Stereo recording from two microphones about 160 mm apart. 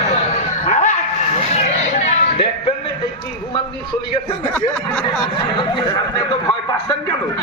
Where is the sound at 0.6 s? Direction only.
50° left (ahead or behind).